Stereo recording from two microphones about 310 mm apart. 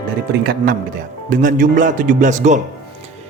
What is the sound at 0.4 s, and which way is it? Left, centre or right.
Speech, right.